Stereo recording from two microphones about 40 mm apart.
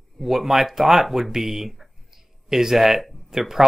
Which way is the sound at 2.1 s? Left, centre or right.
Centre.